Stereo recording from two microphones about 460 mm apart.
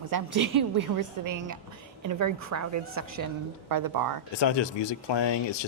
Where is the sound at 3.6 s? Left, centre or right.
Right.